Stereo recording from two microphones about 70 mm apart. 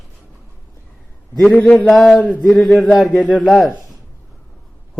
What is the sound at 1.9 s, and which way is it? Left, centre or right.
Speech, centre.